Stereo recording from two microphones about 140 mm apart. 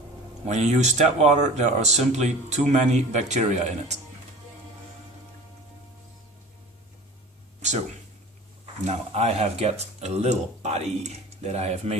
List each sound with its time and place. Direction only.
0.4 s speech: 55° right (ahead or behind)
8.9 s speech: 50° right (ahead or behind)